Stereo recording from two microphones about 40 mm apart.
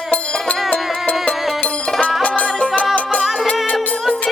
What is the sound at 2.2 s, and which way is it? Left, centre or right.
Music, left.